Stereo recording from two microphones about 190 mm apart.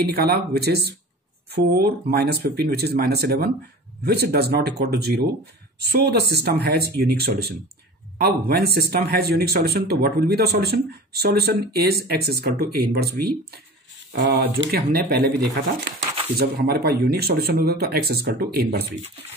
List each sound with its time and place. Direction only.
0.1 s speech: 55° right (ahead or behind)